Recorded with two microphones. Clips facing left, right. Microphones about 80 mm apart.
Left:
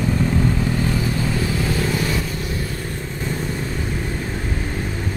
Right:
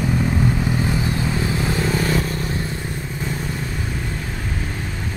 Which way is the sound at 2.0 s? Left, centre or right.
Right.